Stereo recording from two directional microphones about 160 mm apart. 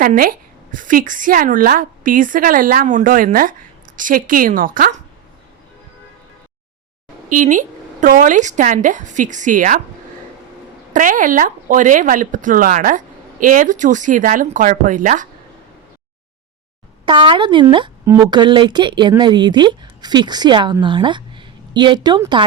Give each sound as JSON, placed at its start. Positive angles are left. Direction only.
{"t": 0.0, "sound": "a woman's voice", "side_deg": -65}
{"t": 7.3, "sound": "speech", "side_deg": -55}
{"t": 10.9, "sound": "a woman's voice", "side_deg": -55}
{"t": 17.1, "sound": "speech", "side_deg": -30}